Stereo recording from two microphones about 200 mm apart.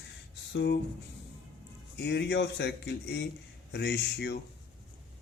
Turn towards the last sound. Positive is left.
turn(degrees=55)  # may be behind; listen again after turning